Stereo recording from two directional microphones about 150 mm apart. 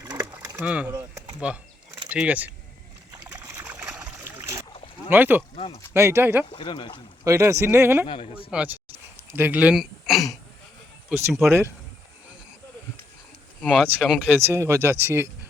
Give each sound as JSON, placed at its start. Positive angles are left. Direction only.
{"t": 0.0, "sound": "a sound", "side_deg": -25}
{"t": 0.3, "sound": "a sound", "side_deg": -15}
{"t": 1.4, "sound": "speech", "side_deg": -5}
{"t": 3.3, "sound": "boat", "side_deg": -10}
{"t": 5.0, "sound": "speech", "side_deg": -15}
{"t": 6.5, "sound": "speech", "side_deg": 35}
{"t": 7.3, "sound": "speech", "side_deg": -20}
{"t": 8.0, "sound": "speech", "side_deg": 35}
{"t": 8.4, "sound": "a sound", "side_deg": -10}
{"t": 11.1, "sound": "speech", "side_deg": -5}
{"t": 11.4, "sound": "speech", "side_deg": -15}
{"t": 13.6, "sound": "speech", "side_deg": 5}
{"t": 13.8, "sound": "speech", "side_deg": -5}
{"t": 14.4, "sound": "speech", "side_deg": -20}